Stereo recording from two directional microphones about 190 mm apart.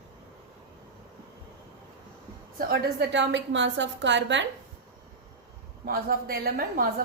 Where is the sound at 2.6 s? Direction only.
55° right (ahead or behind).